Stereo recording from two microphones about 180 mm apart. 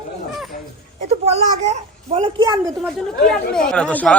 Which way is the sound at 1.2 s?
40° right (ahead or behind).